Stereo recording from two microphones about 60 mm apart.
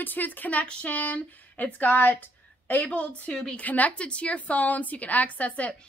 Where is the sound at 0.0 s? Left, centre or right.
Left.